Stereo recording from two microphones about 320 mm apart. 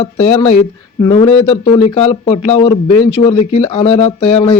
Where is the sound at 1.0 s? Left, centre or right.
Centre.